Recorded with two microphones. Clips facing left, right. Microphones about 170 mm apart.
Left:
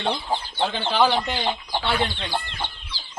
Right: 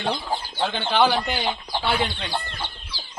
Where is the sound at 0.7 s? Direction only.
Centre (ahead or behind).